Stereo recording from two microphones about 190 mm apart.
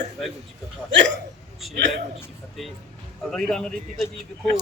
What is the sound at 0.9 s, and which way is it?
Speech, 70° right (ahead or behind).